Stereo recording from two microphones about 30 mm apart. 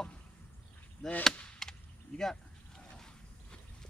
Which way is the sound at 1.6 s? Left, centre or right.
Centre.